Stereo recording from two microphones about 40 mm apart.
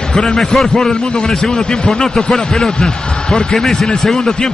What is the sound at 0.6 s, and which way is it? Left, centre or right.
Speech, centre.